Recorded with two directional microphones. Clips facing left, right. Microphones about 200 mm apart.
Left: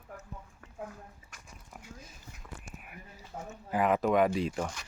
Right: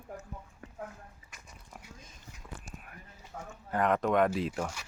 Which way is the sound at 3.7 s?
5° left (ahead or behind).